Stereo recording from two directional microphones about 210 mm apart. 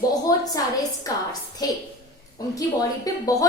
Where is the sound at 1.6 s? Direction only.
20° left (ahead or behind).